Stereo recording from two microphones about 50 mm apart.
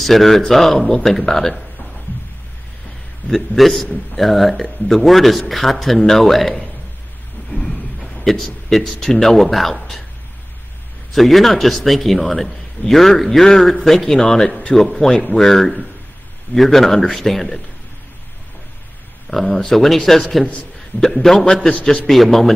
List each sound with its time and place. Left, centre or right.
0.0 s a man's voice: centre
3.3 s a man's voice: centre
3.8 s speech: centre
4.2 s a man's voice: centre
7.5 s a sound: centre
8.6 s a man's voice: centre
11.1 s a man's voice: centre
19.3 s a man's voice: centre
22.1 s a man's voice: centre